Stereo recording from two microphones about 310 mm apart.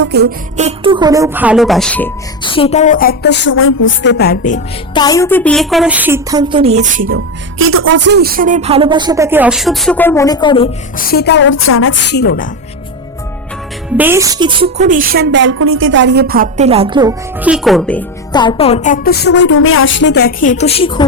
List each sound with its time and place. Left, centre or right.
0.0 s speech: right; by 4.6 s left
4.9 s speech: centre; by 7.2 s right
7.6 s speech: right; by 10.7 s centre
10.9 s a woman's voice: left
13.9 s speech: centre